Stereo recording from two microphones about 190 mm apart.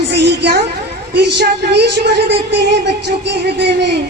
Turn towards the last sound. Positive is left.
turn(degrees=-65)  # may be behind; listen again after turning